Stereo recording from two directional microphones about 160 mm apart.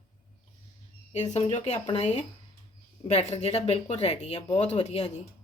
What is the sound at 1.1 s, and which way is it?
Speech, 45° left (ahead or behind).